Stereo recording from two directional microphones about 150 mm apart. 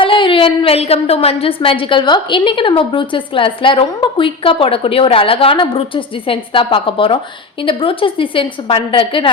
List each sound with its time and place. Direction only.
0.0 s a woman's voice: 35° left (ahead or behind)